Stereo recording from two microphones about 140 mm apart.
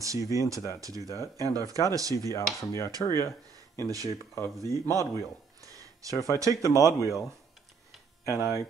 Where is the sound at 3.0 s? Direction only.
20° left (ahead or behind).